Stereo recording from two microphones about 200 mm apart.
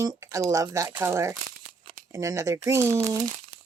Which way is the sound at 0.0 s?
15° right (ahead or behind).